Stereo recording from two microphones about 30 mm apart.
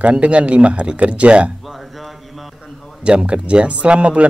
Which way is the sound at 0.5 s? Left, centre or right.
Right.